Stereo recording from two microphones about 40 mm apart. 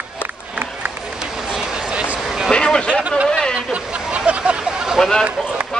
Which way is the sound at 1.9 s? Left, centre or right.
Right.